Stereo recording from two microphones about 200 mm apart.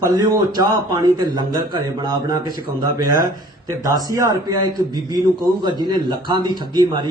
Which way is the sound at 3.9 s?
15° right (ahead or behind).